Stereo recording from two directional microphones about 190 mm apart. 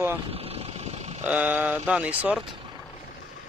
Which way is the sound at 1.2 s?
10° right (ahead or behind).